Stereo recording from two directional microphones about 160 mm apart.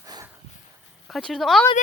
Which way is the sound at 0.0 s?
20° right (ahead or behind).